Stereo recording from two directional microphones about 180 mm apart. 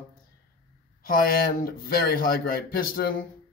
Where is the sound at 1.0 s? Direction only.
50° left (ahead or behind).